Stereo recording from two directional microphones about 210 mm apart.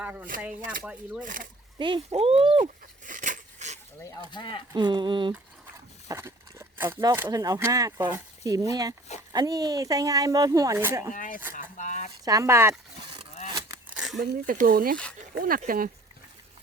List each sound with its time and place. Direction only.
0.0 s speech: 10° right (ahead or behind)
1.2 s speech: 40° right (ahead or behind)
1.8 s speech: 25° right (ahead or behind)
4.3 s speech: 20° left (ahead or behind)
4.7 s speech: 20° right (ahead or behind)
11.1 s speech: 40° left (ahead or behind)
11.5 s rattle: 35° left (ahead or behind)
12.2 s speech: 15° right (ahead or behind)
13.9 s a sound: 5° right (ahead or behind)
14.2 s speech: 45° right (ahead or behind)